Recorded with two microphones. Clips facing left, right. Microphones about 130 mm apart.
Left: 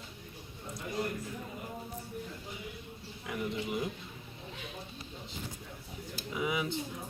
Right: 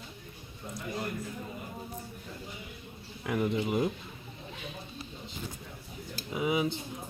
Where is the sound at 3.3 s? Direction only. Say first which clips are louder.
Right 6 dB; 65° right (ahead or behind).